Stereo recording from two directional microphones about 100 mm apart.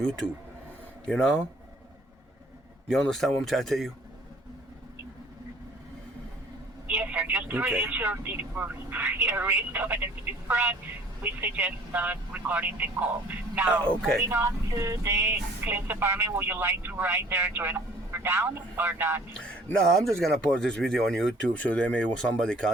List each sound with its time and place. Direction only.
1.0 s speech: 10° left (ahead or behind)
2.9 s speech: 5° left (ahead or behind)
6.8 s speech: 15° right (ahead or behind)
13.8 s speech: 5° left (ahead or behind)
14.3 s speech: 20° right (ahead or behind)
19.3 s speech: 10° left (ahead or behind)